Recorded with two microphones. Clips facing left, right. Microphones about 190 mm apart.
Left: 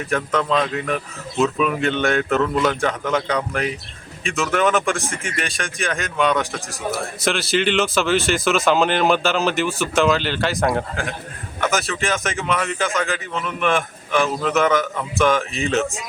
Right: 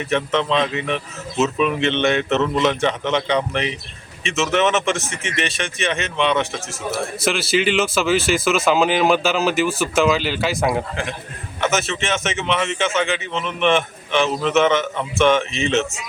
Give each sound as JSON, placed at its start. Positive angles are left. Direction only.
{"t": 0.7, "sound": "speech", "side_deg": 0}
{"t": 2.3, "sound": "a man's voice", "side_deg": -20}
{"t": 3.1, "sound": "speech", "side_deg": 0}